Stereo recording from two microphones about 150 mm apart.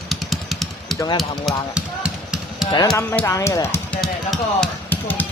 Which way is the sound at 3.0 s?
15° left (ahead or behind).